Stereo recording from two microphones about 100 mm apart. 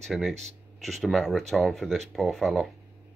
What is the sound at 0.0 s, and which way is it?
Speech, 5° left (ahead or behind).